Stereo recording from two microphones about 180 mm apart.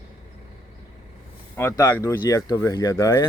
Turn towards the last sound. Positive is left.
turn(degrees=15)  # may be behind; listen again after turning